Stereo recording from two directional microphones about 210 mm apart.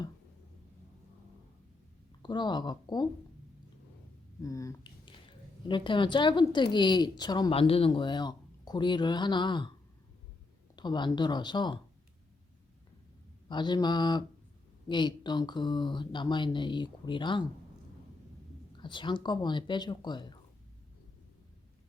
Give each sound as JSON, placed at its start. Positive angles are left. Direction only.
{"t": 2.2, "sound": "a woman's voice", "side_deg": 20}
{"t": 4.4, "sound": "a woman's voice", "side_deg": 15}
{"t": 10.8, "sound": "a woman's voice", "side_deg": 20}
{"t": 13.5, "sound": "a woman's voice", "side_deg": 20}
{"t": 18.8, "sound": "a woman's voice", "side_deg": 20}